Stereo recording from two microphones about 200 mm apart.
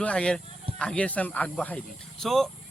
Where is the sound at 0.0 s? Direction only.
5° left (ahead or behind).